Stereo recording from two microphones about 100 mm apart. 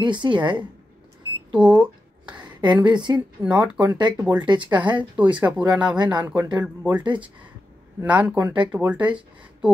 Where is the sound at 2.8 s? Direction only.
50° right (ahead or behind).